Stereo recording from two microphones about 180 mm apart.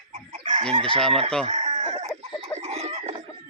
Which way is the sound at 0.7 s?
30° right (ahead or behind).